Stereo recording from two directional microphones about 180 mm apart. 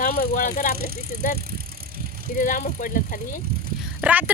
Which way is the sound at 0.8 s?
55° right (ahead or behind).